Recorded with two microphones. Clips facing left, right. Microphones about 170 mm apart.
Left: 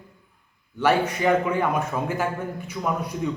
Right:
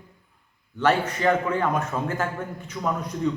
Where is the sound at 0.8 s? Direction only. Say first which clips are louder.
Left 1 dB; 10° left (ahead or behind).